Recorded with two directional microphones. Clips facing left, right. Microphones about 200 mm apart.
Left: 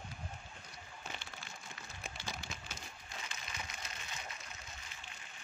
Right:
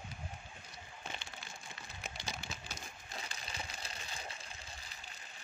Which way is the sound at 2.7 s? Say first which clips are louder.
Right 1 dB; 35° right (ahead or behind).